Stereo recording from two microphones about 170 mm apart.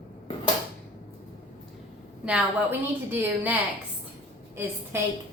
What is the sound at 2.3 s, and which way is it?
A woman's voice, 10° right (ahead or behind).